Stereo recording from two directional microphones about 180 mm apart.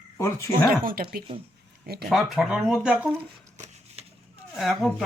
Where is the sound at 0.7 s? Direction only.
55° right (ahead or behind).